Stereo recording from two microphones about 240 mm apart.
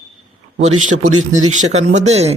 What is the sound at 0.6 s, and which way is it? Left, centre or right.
A man's voice, right.